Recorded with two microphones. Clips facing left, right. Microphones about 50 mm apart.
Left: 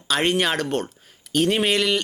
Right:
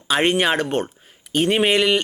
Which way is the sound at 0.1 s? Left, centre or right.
Centre.